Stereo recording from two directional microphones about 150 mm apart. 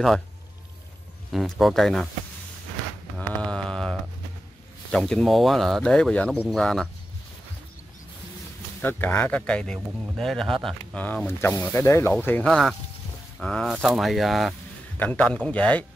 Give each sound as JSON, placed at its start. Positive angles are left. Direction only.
{"t": 1.3, "sound": "speech", "side_deg": 0}
{"t": 3.2, "sound": "mantra", "side_deg": 5}
{"t": 4.9, "sound": "speech", "side_deg": 0}
{"t": 8.8, "sound": "speech", "side_deg": 15}
{"t": 11.2, "sound": "speech", "side_deg": 15}